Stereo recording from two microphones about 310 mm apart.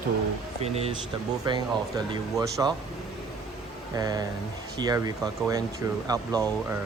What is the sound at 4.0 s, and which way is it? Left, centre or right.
Speech, centre.